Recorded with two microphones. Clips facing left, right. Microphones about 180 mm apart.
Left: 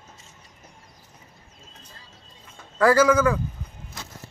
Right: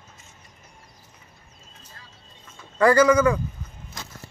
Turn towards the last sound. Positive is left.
turn(degrees=5)  # may be behind; listen again after turning